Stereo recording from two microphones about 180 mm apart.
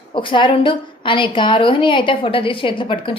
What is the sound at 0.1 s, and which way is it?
A woman's voice, 25° left (ahead or behind).